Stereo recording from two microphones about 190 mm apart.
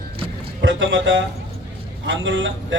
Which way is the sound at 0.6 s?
85° right.